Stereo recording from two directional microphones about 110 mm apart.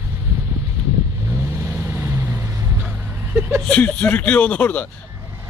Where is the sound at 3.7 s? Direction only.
10° left (ahead or behind).